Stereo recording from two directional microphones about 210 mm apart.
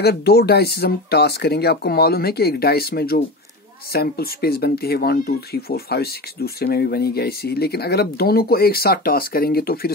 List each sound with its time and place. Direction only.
0.0 s speech: 50° left (ahead or behind)